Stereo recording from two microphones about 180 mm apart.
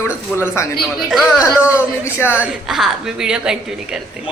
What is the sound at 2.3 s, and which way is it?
A woman's voice, 5° right (ahead or behind).